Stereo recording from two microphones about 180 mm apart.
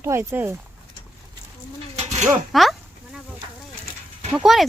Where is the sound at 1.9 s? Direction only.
40° right (ahead or behind).